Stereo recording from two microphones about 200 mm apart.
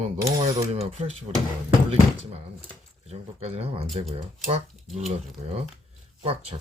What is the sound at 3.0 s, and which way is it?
Speech, 30° right (ahead or behind).